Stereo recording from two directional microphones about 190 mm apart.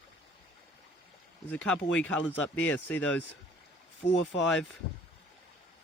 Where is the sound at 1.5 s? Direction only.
5° left (ahead or behind).